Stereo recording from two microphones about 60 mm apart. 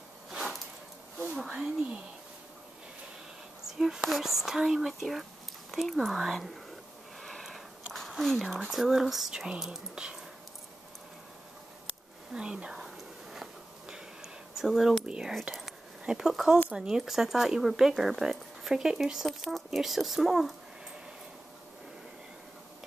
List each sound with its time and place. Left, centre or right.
1.3 s speech: centre
3.7 s speech: centre
7.2 s sniff: centre
8.2 s speech: centre
12.3 s speech: centre
12.8 s a sound: centre
15.0 s speech: centre
15.5 s a sound: centre
16.7 s speech: centre
19.2 s speech: centre